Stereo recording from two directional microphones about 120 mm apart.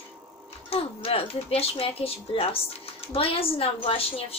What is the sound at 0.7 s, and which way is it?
Speech, 55° left (ahead or behind).